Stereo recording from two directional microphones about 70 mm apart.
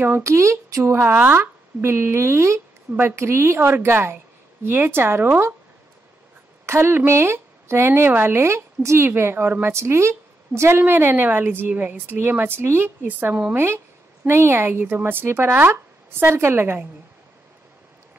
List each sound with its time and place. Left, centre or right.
0.2 s speech: right
1.1 s a woman's voice: right
6.6 s a woman's voice: right
14.2 s a woman's voice: right